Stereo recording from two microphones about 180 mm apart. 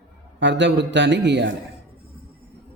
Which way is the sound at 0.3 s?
85° right.